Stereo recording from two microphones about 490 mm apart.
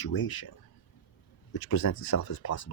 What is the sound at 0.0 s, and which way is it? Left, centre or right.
Speech, left.